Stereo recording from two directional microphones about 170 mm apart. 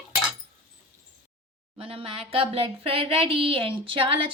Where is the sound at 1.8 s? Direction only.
35° right (ahead or behind).